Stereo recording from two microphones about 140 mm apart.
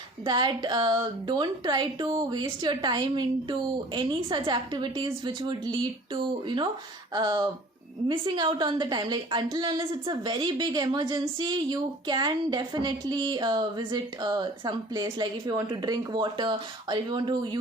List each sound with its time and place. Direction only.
0.3 s a woman's voice: 30° right (ahead or behind)
7.1 s a woman's voice: 30° right (ahead or behind)